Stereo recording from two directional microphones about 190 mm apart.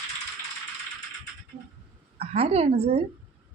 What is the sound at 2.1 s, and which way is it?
Speech, 30° right (ahead or behind).